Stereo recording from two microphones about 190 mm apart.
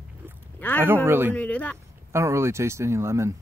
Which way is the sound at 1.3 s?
5° left (ahead or behind).